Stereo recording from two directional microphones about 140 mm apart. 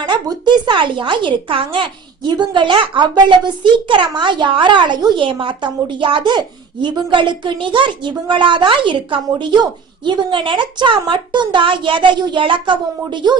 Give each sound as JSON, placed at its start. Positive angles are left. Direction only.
{"t": 0.0, "sound": "a woman's voice", "side_deg": -30}